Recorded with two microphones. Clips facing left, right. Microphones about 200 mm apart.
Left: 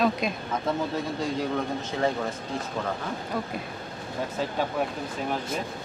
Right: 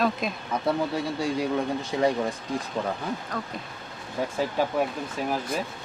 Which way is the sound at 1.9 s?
15° right (ahead or behind).